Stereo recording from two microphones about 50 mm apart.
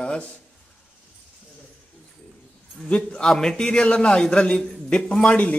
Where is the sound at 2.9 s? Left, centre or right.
Left.